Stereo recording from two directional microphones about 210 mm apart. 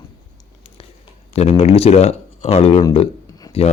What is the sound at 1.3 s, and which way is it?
Speech, 30° left (ahead or behind).